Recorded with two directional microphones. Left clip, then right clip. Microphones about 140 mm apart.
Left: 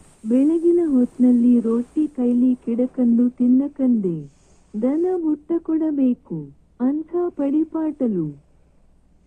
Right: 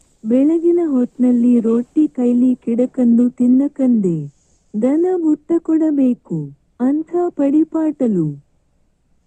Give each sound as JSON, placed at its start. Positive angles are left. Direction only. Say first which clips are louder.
{"t": 0.3, "sound": "speech", "louder": "right 3 dB", "side_deg": -40}